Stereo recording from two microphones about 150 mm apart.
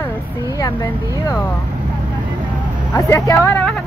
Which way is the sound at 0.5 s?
30° left (ahead or behind).